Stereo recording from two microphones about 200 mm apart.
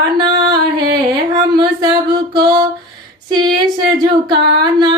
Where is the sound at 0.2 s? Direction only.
20° right (ahead or behind).